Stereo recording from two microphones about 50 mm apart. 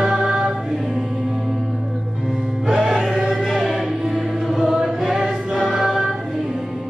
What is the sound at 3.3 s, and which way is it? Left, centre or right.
Choir, centre.